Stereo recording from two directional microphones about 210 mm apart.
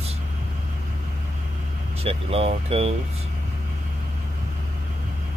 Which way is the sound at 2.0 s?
30° right (ahead or behind).